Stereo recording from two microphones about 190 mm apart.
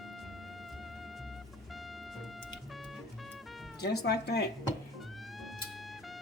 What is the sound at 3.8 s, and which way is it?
Speech, 60° left (ahead or behind).